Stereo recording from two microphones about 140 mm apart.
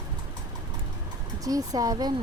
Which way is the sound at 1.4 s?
25° right (ahead or behind).